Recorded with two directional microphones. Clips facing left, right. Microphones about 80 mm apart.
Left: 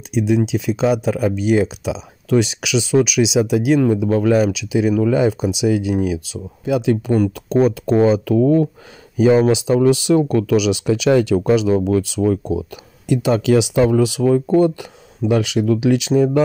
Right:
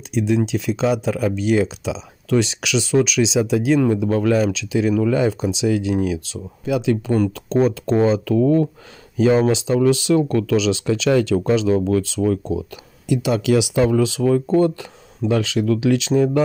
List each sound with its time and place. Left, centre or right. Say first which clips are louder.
0.1 s speech: left 2 dB; centre
6.6 s speech: left 2 dB; left
7.2 s speech: left 2 dB; centre
13.1 s speech: left 2 dB; left